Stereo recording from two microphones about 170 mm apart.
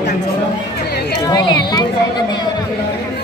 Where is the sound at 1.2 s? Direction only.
25° left (ahead or behind).